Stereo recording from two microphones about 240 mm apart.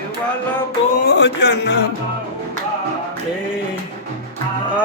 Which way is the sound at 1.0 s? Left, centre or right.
Left.